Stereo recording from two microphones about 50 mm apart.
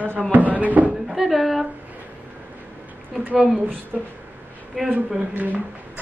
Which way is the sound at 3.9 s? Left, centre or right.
Right.